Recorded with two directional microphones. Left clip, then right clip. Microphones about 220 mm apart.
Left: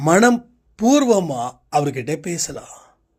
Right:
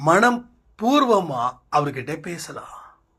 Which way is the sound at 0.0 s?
50° left (ahead or behind).